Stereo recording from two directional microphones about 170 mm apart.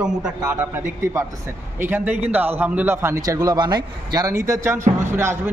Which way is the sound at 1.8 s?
10° right (ahead or behind).